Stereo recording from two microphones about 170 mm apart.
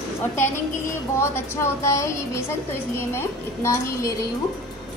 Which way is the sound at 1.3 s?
15° left (ahead or behind).